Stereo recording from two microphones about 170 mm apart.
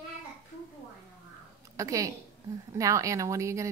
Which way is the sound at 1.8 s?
20° right (ahead or behind).